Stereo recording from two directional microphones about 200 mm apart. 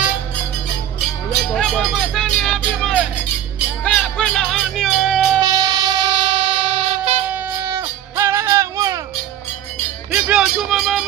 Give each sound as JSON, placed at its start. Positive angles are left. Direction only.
{"t": 1.5, "sound": "vehicle", "side_deg": 0}
{"t": 3.5, "sound": "music", "side_deg": 5}
{"t": 5.4, "sound": "train", "side_deg": -20}
{"t": 7.2, "sound": "music", "side_deg": -15}
{"t": 10.1, "sound": "music", "side_deg": -5}